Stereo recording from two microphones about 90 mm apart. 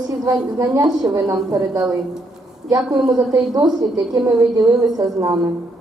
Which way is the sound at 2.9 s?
45° right (ahead or behind).